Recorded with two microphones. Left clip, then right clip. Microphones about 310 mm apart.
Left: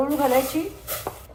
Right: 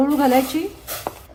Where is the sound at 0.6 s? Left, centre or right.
Centre.